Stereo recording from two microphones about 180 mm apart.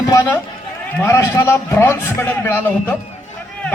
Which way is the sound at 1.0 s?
15° left (ahead or behind).